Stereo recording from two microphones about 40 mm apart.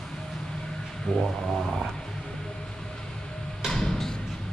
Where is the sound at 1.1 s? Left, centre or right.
Centre.